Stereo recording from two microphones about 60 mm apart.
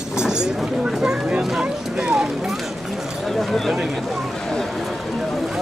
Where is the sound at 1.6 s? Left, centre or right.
Centre.